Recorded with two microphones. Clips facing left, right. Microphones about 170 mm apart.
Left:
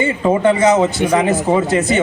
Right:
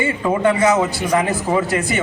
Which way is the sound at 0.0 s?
20° left (ahead or behind).